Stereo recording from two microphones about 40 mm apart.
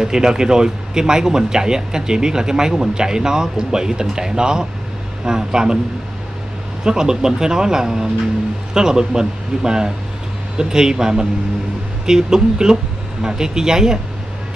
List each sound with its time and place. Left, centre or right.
0.0 s speech: centre
6.8 s speech: centre